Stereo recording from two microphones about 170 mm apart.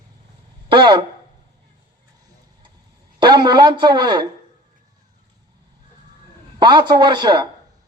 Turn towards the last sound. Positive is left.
turn(degrees=-25)  # may be behind; listen again after turning